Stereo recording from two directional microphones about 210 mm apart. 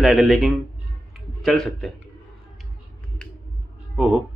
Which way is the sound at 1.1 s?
Centre (ahead or behind).